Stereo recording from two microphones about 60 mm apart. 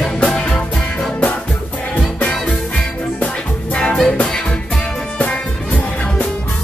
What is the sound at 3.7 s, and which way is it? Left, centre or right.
Music, centre.